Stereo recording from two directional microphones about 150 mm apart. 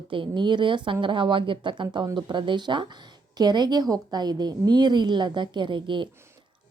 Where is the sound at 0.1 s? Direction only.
35° right (ahead or behind).